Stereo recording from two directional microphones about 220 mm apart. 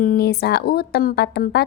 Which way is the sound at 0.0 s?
40° left (ahead or behind).